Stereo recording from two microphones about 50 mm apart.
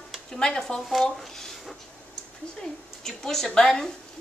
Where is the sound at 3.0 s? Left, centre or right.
Centre.